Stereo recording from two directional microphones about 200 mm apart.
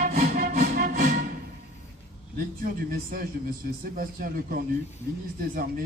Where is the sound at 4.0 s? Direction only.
45° right (ahead or behind).